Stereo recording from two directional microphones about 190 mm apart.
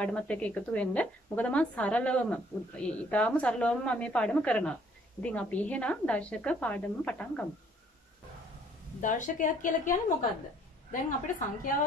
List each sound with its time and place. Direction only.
0.0 s a woman's voice: 5° left (ahead or behind)
9.0 s a woman's voice: 40° left (ahead or behind)